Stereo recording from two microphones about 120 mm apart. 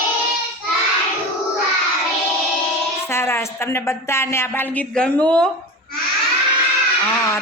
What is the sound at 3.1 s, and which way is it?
A woman's voice, 20° left (ahead or behind).